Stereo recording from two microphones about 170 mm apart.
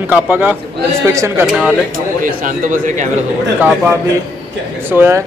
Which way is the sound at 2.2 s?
55° right (ahead or behind).